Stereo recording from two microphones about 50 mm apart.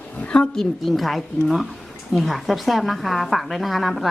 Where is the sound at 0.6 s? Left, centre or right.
Centre.